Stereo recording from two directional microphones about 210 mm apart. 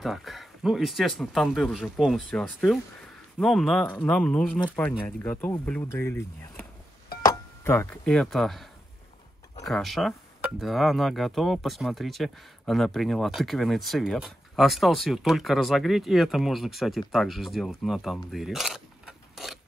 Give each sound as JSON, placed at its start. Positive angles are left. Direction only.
{"t": 0.0, "sound": "speech", "side_deg": 0}
{"t": 9.7, "sound": "speech", "side_deg": 0}